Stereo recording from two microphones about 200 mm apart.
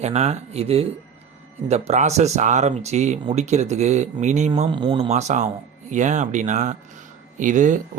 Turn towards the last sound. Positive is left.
turn(degrees=-40)  # may be behind; listen again after turning